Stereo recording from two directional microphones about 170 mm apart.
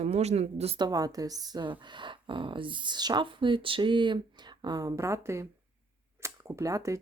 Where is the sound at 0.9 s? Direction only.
20° right (ahead or behind).